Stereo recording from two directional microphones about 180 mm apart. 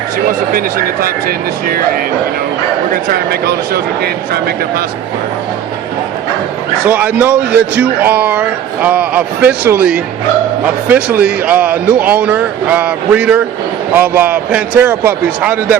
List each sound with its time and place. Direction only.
1.6 s speech: 55° right (ahead or behind)
6.8 s a man's voice: 10° right (ahead or behind)